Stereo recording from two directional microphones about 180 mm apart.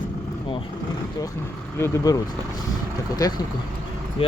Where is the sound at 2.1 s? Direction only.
20° left (ahead or behind).